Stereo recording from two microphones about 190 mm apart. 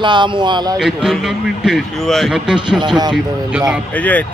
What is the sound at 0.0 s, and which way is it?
Speech, 25° right (ahead or behind).